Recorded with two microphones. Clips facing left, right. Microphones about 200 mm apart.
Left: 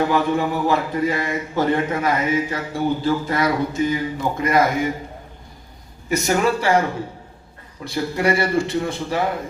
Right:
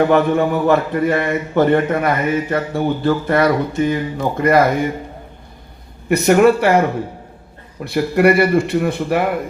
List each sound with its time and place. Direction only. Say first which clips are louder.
0.0 s a man's voice: right 5 dB; 60° right (ahead or behind)
6.1 s a man's voice: right 8 dB; 60° right (ahead or behind)
7.9 s a man's voice: right 7 dB; 60° right (ahead or behind)